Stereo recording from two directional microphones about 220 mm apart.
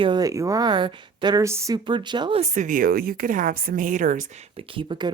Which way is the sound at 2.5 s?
35° right (ahead or behind).